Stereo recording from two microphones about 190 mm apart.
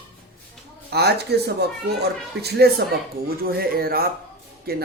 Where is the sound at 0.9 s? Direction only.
60° right (ahead or behind).